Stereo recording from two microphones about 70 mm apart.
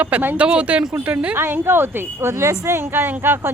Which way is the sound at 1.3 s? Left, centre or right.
Right.